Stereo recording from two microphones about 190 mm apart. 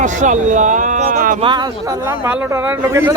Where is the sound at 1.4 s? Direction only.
25° right (ahead or behind).